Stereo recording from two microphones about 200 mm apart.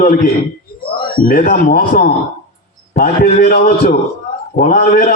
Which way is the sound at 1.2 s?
45° left (ahead or behind).